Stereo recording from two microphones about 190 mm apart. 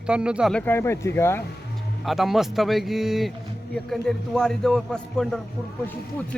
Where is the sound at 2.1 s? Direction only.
Centre (ahead or behind).